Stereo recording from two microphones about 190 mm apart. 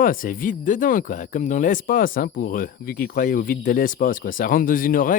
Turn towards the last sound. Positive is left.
turn(degrees=45)  # may be behind; listen again after turning